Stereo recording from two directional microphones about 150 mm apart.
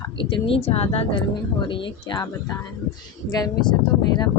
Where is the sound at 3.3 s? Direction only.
25° left (ahead or behind).